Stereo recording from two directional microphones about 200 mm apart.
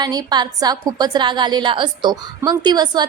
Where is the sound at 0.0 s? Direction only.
20° right (ahead or behind).